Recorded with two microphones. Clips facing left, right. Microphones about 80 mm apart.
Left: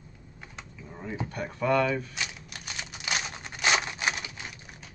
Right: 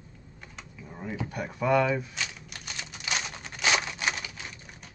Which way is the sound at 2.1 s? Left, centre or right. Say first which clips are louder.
Even; centre.